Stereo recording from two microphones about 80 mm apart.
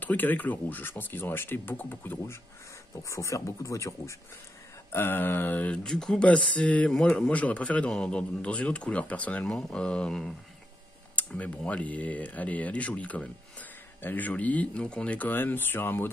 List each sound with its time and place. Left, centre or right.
0.0 s speech: left
3.0 s speech: left
4.9 s speech: left
5.9 s speech: centre
11.1 s speech: centre